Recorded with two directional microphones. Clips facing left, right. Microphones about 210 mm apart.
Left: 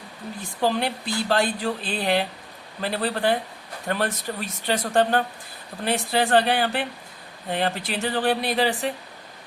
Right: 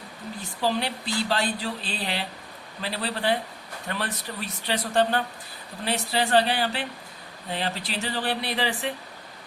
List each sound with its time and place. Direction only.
0.6 s speech: 50° left (ahead or behind)